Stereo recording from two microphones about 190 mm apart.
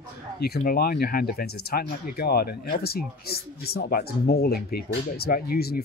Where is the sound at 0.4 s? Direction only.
55° left (ahead or behind).